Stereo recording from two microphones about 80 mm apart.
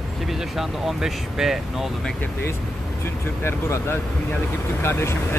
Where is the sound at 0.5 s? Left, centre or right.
Centre.